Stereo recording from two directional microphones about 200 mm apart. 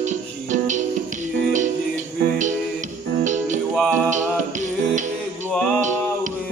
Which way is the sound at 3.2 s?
40° right (ahead or behind).